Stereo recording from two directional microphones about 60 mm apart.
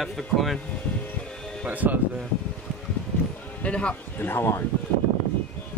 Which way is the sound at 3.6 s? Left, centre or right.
Centre.